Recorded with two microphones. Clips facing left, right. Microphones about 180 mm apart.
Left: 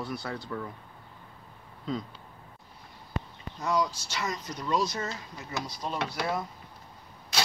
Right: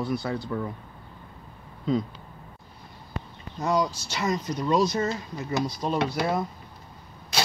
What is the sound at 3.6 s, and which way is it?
Speech, 30° right (ahead or behind).